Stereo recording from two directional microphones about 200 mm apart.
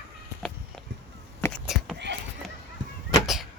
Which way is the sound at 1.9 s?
60° right (ahead or behind).